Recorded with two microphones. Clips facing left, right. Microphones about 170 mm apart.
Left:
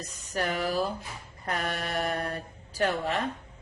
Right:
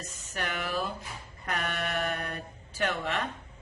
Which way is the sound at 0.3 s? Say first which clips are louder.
Left 5 dB; 35° left (ahead or behind).